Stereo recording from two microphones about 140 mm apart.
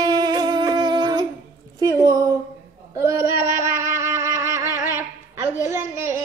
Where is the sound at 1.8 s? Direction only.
25° right (ahead or behind).